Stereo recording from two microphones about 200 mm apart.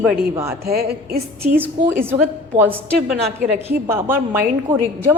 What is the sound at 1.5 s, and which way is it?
A woman's voice, 10° right (ahead or behind).